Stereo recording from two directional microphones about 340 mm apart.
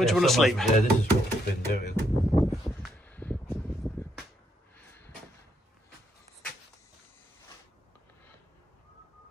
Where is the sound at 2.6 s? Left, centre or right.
Centre.